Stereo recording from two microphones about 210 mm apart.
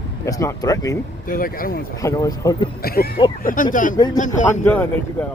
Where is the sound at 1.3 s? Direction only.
40° left (ahead or behind).